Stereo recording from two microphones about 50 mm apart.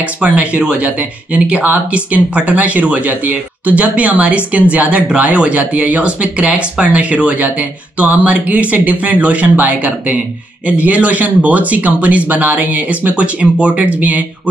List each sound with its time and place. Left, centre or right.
0.0 s speech: right